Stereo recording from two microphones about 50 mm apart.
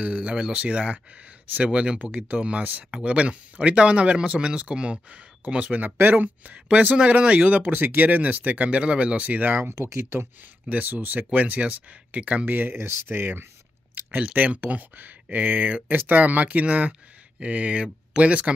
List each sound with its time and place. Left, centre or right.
0.0 s speech: right
9.8 s speech: right
10.7 s speech: right
12.4 s speech: right
12.7 s speech: right
13.9 s speech: right